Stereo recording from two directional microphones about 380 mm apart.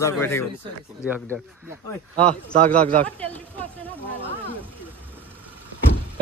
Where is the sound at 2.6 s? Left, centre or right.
Right.